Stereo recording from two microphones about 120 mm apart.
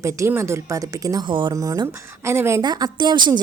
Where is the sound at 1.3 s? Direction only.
40° right (ahead or behind).